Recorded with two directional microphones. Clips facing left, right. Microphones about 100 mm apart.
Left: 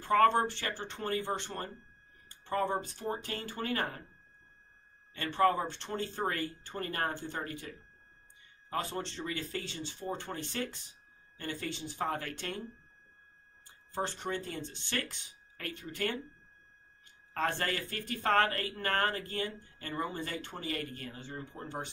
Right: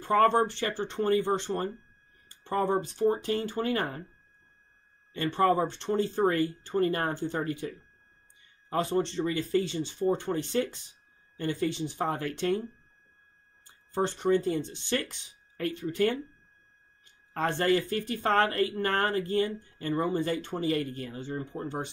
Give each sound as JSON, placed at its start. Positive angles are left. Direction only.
{"t": 0.1, "sound": "speech", "side_deg": -20}
{"t": 5.1, "sound": "speech", "side_deg": -20}
{"t": 8.6, "sound": "speech", "side_deg": -25}
{"t": 12.0, "sound": "speech", "side_deg": -20}
{"t": 13.9, "sound": "speech", "side_deg": -15}
{"t": 17.3, "sound": "speech", "side_deg": -20}